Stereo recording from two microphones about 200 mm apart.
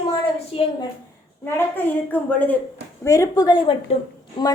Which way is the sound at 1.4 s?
10° left (ahead or behind).